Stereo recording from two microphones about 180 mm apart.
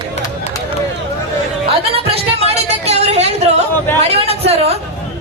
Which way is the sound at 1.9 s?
35° right (ahead or behind).